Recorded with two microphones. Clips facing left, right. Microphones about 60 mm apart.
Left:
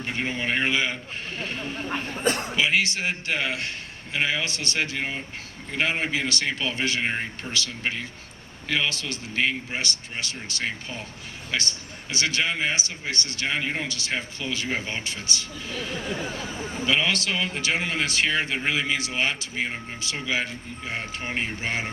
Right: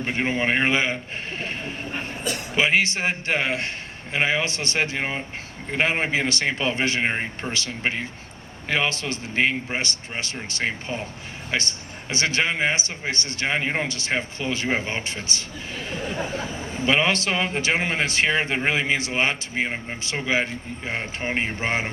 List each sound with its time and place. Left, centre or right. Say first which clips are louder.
0.0 s a man's voice: right 5 dB; right
2.2 s a man's voice: left 7 dB; left
2.6 s a man's voice: right 3 dB; right